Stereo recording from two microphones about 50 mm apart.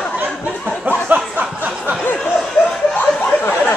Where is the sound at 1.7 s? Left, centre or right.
Centre.